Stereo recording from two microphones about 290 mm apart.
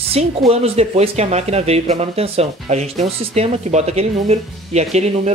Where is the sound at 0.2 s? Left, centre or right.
Right.